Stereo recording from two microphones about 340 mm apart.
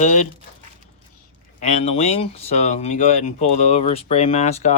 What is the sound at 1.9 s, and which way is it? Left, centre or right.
Speech, centre.